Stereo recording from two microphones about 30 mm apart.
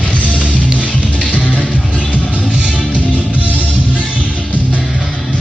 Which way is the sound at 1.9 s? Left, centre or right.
Left.